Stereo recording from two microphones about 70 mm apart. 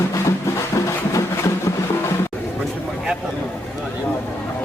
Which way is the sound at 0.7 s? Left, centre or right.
Left.